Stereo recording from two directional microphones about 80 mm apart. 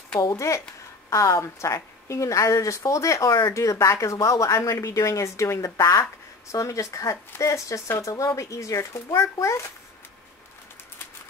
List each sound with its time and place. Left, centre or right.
1.1 s speech: left